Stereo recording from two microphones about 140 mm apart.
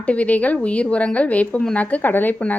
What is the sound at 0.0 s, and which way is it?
A woman's voice, 10° left (ahead or behind).